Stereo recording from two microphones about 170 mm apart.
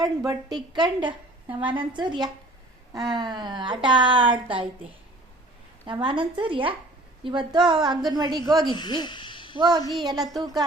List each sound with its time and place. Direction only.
0.0 s speech: 20° right (ahead or behind)
5.8 s speech: 25° right (ahead or behind)
8.7 s a child's voice: 25° left (ahead or behind)
9.6 s speech: 25° right (ahead or behind)